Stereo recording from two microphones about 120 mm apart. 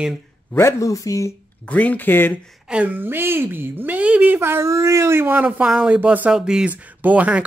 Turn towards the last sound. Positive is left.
turn(degrees=-10)  # may be behind; listen again after turning